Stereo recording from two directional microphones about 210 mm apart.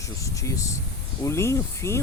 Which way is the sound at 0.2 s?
15° left (ahead or behind).